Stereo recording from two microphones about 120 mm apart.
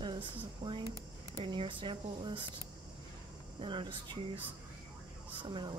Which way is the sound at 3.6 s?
40° right (ahead or behind).